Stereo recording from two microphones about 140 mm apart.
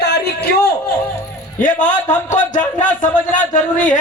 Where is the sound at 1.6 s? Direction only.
70° left (ahead or behind).